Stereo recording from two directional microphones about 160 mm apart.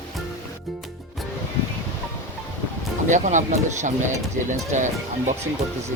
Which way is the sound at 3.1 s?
50° right (ahead or behind).